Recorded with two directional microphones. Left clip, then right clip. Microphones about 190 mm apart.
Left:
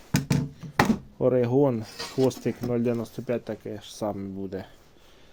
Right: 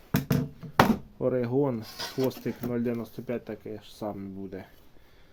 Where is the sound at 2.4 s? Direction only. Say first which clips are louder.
Left 4 dB; 35° left (ahead or behind).